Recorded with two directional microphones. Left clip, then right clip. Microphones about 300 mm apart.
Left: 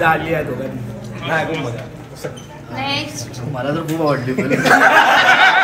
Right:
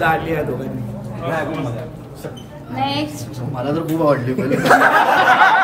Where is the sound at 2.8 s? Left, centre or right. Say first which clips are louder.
Right 1 dB; right.